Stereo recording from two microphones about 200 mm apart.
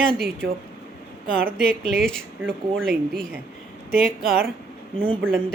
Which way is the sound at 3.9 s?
50° right (ahead or behind).